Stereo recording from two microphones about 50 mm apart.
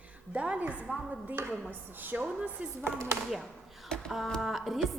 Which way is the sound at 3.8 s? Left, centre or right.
Centre.